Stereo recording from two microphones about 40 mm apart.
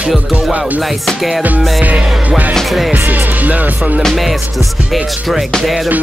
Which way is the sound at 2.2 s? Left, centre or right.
Right.